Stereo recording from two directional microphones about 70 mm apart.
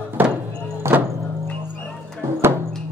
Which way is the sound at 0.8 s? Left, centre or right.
Right.